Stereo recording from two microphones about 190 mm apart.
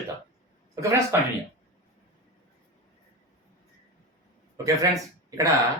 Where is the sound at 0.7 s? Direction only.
15° right (ahead or behind).